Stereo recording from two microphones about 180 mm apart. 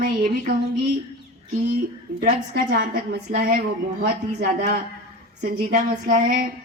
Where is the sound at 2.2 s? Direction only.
50° right (ahead or behind).